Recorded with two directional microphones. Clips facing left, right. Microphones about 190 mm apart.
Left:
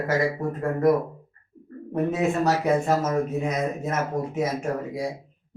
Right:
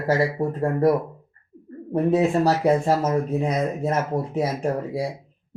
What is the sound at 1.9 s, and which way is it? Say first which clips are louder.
Speech: right 4 dB; 30° right (ahead or behind).